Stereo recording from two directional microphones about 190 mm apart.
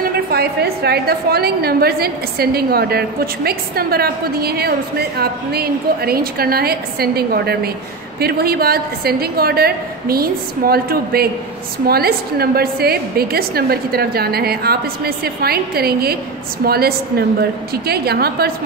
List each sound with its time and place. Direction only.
0.0 s a woman's voice: 55° right (ahead or behind)